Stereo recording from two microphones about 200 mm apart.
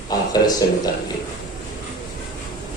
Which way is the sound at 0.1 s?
20° left (ahead or behind).